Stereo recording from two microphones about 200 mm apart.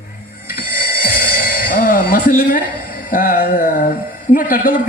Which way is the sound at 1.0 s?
50° left (ahead or behind).